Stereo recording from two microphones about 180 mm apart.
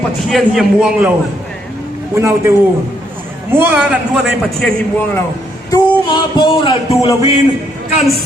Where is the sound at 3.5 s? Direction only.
10° right (ahead or behind).